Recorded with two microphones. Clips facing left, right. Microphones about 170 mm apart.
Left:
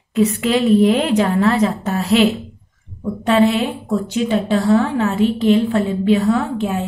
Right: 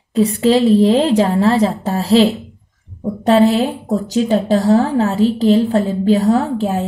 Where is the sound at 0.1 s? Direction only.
35° right (ahead or behind).